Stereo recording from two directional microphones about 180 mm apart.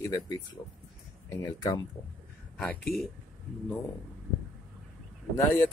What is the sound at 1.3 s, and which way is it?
Speech, 20° left (ahead or behind).